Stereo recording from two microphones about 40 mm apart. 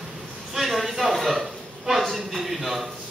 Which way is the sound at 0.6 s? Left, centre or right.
Centre.